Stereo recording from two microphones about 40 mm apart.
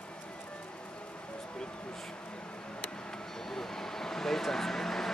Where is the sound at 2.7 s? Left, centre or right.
Left.